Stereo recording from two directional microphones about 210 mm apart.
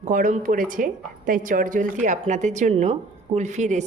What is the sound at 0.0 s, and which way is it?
A woman's voice, 35° right (ahead or behind).